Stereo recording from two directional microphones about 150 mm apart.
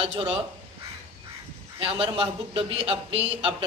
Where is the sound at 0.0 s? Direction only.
35° right (ahead or behind).